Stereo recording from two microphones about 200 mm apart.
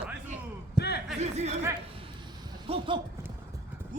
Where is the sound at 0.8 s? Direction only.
55° left (ahead or behind).